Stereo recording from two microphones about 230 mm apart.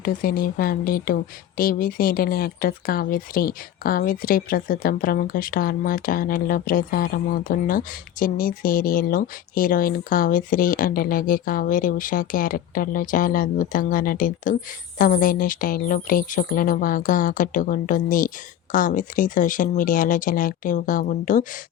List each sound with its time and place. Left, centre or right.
0.0 s speech: left